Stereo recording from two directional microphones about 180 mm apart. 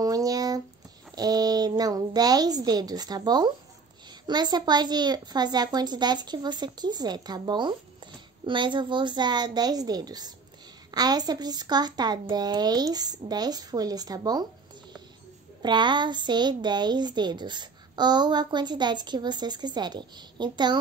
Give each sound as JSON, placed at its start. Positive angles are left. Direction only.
{"t": 0.0, "sound": "a sound", "side_deg": -20}
{"t": 1.1, "sound": "a woman's voice", "side_deg": -20}
{"t": 15.6, "sound": "a woman's voice", "side_deg": -25}